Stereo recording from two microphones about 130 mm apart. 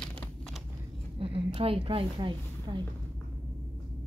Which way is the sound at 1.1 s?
45° right (ahead or behind).